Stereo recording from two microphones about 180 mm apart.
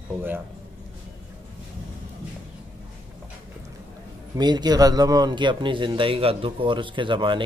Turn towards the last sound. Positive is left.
turn(degrees=-25)  # may be behind; listen again after turning